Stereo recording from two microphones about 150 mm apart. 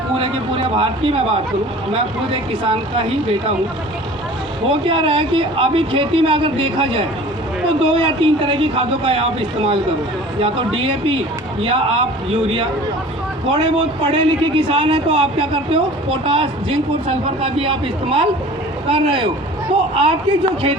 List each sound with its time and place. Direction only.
0.2 s speech: 40° right (ahead or behind)
4.7 s speech: 35° right (ahead or behind)
13.5 s speech: 35° right (ahead or behind)